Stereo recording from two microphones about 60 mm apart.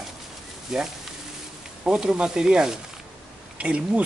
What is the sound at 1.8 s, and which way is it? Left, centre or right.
Speech, centre.